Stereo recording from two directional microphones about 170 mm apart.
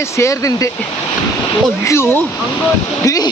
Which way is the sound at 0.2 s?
20° left (ahead or behind).